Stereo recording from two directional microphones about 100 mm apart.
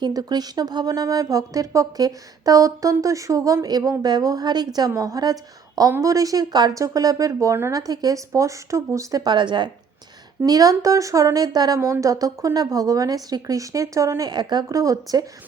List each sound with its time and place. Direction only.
0.0 s speech: 40° right (ahead or behind)
9.2 s a woman's voice: 50° right (ahead or behind)
10.4 s speech: 40° right (ahead or behind)
11.8 s speech: 30° right (ahead or behind)